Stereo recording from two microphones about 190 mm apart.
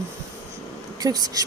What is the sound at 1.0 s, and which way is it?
Speech, 20° right (ahead or behind).